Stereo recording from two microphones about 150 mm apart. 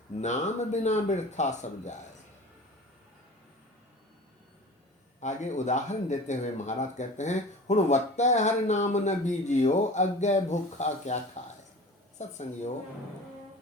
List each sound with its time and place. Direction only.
0.2 s speech: 50° left (ahead or behind)
5.2 s speech: 50° left (ahead or behind)
12.2 s speech: 50° left (ahead or behind)